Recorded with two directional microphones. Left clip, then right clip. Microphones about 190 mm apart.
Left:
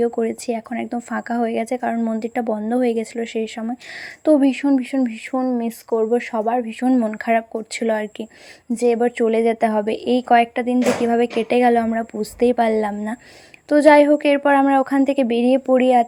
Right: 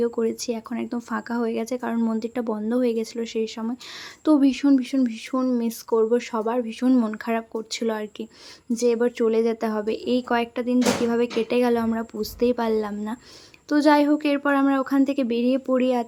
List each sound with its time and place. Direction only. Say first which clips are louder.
0.0 s speech: left 3 dB; 15° left (ahead or behind)